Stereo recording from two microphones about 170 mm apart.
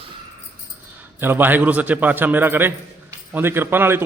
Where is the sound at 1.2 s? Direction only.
10° right (ahead or behind).